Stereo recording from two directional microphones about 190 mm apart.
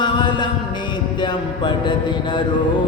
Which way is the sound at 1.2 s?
25° left (ahead or behind).